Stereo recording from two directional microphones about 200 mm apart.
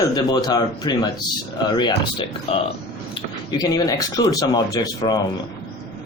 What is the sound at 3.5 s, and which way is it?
Speech, 20° left (ahead or behind).